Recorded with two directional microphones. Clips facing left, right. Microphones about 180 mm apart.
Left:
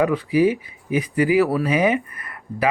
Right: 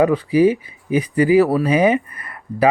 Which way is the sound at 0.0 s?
30° right (ahead or behind).